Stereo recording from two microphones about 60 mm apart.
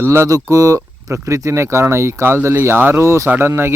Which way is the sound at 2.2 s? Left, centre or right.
Right.